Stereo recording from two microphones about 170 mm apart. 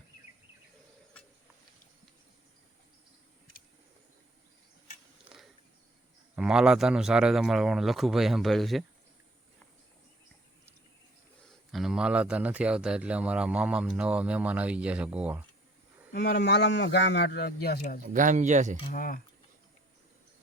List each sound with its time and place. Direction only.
5.3 s a sound: 10° right (ahead or behind)
6.3 s speech: 5° right (ahead or behind)
11.7 s speech: 5° right (ahead or behind)
16.1 s a man's voice: 80° left
18.0 s speech: 50° right (ahead or behind)
18.9 s speech: 55° left (ahead or behind)